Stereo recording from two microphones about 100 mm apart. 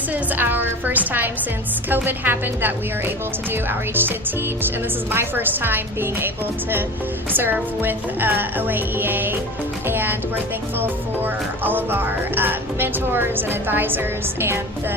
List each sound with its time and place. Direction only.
0.1 s speech: 20° right (ahead or behind)
5.1 s speech: 20° right (ahead or behind)